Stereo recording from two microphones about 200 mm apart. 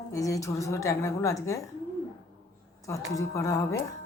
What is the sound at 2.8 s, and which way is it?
Speech, 15° left (ahead or behind).